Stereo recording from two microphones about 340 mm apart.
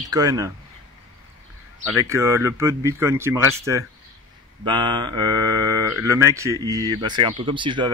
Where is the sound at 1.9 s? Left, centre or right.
Centre.